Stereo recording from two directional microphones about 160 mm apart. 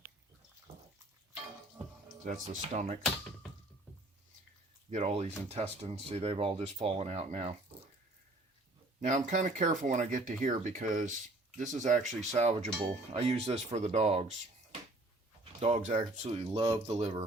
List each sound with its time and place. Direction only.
2.2 s speech: 55° right (ahead or behind)
4.9 s speech: 45° right (ahead or behind)
9.0 s speech: 50° right (ahead or behind)
15.6 s speech: 50° right (ahead or behind)